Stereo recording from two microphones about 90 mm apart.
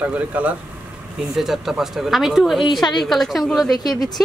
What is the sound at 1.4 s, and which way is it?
Speech, 5° right (ahead or behind).